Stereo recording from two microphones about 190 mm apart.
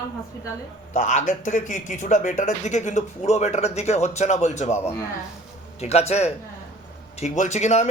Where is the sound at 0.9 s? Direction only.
40° left (ahead or behind).